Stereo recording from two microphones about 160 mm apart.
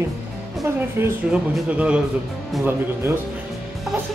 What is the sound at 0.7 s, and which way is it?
Speech, 15° right (ahead or behind).